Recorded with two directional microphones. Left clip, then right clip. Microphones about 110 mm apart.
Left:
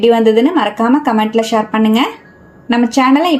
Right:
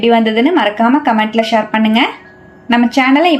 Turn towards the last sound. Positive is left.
turn(degrees=45)  # may be behind; listen again after turning